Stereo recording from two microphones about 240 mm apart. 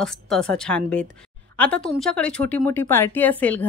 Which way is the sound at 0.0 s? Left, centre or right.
Centre.